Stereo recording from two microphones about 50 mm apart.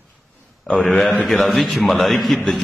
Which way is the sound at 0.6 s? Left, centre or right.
Left.